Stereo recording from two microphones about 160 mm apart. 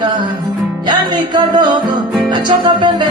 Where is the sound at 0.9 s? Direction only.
30° right (ahead or behind).